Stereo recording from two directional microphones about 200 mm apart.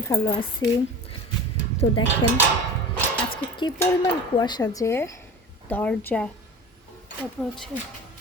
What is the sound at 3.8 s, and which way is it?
Speech, 15° left (ahead or behind).